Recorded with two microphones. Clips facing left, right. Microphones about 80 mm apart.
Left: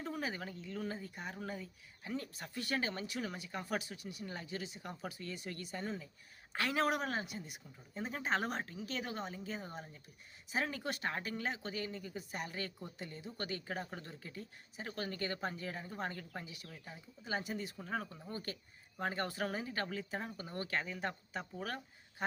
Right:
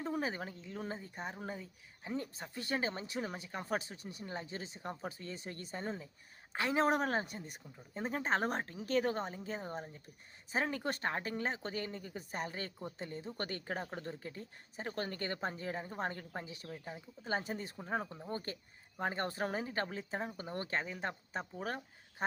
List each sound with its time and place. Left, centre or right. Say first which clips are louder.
0.0 s speech: right 3 dB; right
6.5 s speech: right 3 dB; right
7.0 s a woman's voice: right 4 dB; right